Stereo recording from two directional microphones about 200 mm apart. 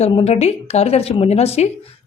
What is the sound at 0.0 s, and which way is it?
Speech, 30° left (ahead or behind).